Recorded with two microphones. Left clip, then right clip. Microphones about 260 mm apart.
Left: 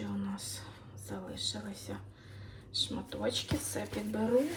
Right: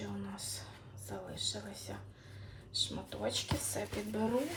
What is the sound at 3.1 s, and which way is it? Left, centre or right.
Speech, centre.